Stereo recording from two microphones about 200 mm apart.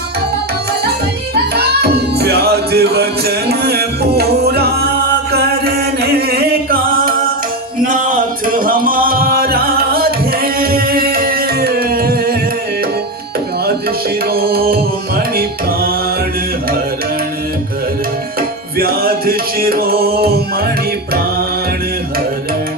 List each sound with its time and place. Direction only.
1.5 s music: 55° right (ahead or behind)
14.3 s music: 50° right (ahead or behind)
18.8 s music: 50° right (ahead or behind)